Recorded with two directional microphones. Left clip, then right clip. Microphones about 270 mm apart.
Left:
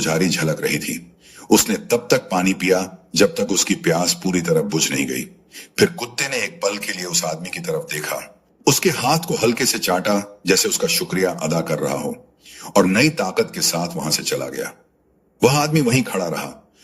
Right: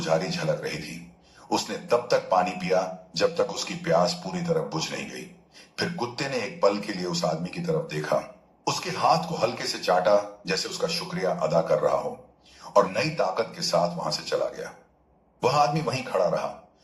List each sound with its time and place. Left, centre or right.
0.0 s a man's voice: left